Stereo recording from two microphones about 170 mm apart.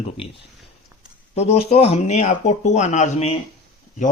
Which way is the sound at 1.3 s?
40° left (ahead or behind).